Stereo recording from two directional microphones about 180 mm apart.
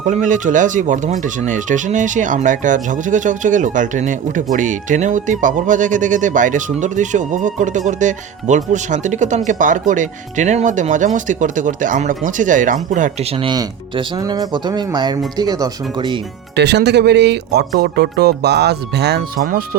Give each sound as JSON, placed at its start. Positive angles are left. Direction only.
{"t": 0.0, "sound": "speech", "side_deg": -45}
{"t": 16.6, "sound": "speech", "side_deg": -70}